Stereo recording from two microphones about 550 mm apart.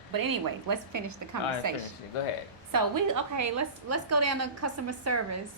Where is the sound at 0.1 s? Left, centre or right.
Right.